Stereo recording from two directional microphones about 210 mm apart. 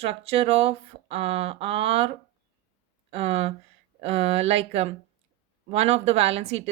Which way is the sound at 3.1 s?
30° right (ahead or behind).